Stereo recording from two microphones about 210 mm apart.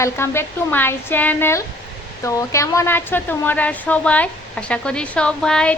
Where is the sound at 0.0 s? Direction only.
10° left (ahead or behind).